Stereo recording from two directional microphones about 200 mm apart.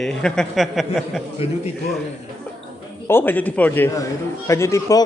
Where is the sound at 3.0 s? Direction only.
10° left (ahead or behind).